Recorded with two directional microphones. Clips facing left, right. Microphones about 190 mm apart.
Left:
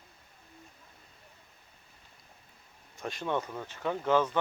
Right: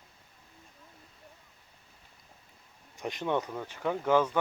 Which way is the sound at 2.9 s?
15° right (ahead or behind).